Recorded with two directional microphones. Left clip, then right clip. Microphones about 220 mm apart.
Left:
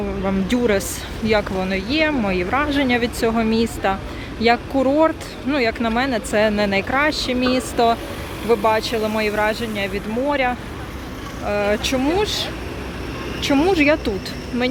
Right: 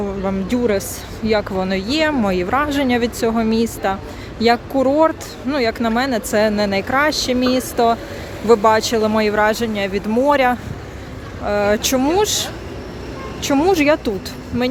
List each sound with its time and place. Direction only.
0.3 s a woman's voice: 5° right (ahead or behind)